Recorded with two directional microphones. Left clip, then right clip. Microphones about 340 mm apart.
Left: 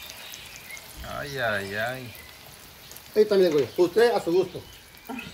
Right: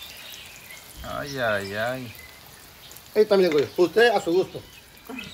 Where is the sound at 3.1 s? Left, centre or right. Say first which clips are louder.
Right 1 dB; centre.